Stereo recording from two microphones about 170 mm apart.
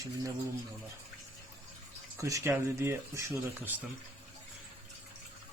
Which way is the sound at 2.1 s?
20° right (ahead or behind).